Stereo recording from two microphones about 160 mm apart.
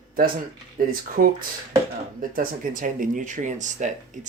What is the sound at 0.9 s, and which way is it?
Speech, 60° right (ahead or behind).